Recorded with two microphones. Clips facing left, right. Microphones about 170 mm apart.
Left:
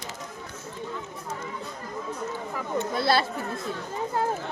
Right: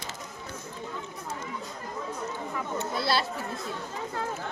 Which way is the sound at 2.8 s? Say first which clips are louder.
Left 5 dB; 55° left (ahead or behind).